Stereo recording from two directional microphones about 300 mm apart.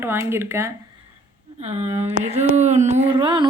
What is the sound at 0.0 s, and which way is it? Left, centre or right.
Speech, centre.